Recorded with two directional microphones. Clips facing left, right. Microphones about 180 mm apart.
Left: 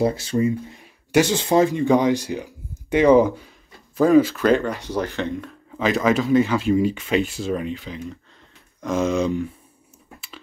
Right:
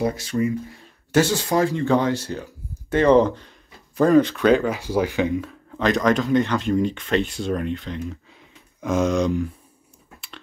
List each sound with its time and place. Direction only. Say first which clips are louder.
0.0 s speech: left 2 dB; 30° left (ahead or behind)
0.7 s speech: even; 15° left (ahead or behind); by 9.5 s centre (ahead or behind)